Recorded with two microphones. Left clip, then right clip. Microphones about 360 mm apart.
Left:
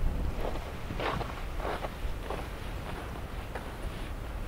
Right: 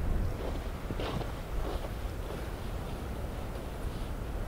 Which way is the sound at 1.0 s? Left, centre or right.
Centre.